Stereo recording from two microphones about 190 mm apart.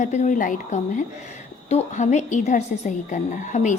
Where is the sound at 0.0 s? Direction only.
40° left (ahead or behind).